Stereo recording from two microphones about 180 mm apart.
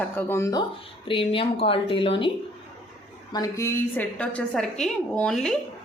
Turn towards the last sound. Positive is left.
turn(degrees=5)  # may be behind; listen again after turning